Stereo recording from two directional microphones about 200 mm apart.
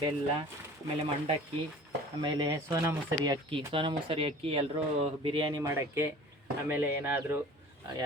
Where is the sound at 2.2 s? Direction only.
20° right (ahead or behind).